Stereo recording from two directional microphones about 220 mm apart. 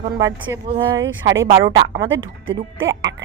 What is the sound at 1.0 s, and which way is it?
Speech, 60° right (ahead or behind).